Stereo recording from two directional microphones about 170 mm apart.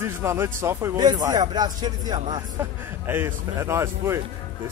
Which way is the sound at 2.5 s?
10° right (ahead or behind).